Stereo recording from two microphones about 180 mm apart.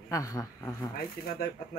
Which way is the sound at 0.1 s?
20° left (ahead or behind).